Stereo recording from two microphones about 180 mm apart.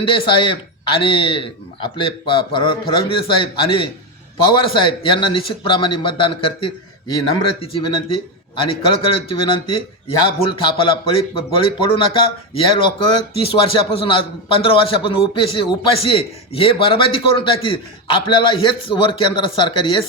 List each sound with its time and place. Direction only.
0.1 s speech: 30° left (ahead or behind)